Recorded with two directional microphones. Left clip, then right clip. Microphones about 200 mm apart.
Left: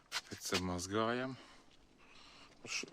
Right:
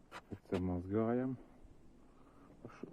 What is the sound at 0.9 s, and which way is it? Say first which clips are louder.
Speech: even; 15° left (ahead or behind).